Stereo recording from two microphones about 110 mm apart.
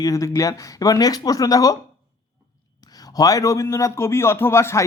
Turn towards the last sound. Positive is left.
turn(degrees=25)  # may be behind; listen again after turning